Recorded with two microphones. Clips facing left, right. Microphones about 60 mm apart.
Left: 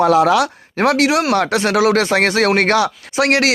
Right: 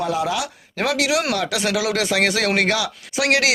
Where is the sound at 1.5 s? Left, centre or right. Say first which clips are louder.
Left 8 dB; left.